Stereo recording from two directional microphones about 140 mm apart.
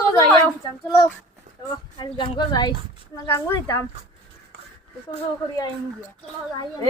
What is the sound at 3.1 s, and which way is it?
Speech, 15° left (ahead or behind).